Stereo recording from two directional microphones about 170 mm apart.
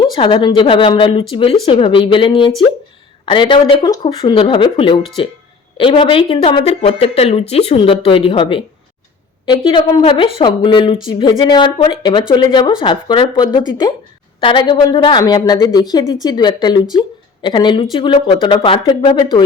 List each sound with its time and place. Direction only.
0.0 s speech: 30° left (ahead or behind)